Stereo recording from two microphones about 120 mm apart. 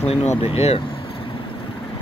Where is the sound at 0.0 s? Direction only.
60° left (ahead or behind).